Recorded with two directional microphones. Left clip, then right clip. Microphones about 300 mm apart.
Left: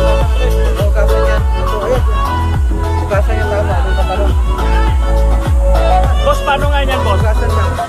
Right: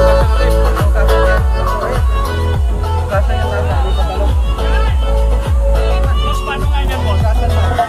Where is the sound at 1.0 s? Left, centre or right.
Centre.